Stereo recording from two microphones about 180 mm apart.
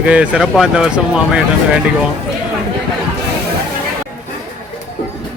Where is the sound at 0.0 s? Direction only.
5° right (ahead or behind).